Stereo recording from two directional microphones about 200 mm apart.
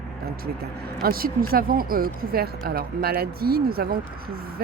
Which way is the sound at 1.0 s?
45° right (ahead or behind).